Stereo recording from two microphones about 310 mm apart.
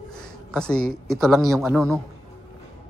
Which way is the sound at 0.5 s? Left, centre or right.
Centre.